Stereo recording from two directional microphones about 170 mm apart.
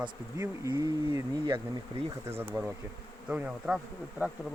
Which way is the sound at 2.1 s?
15° right (ahead or behind).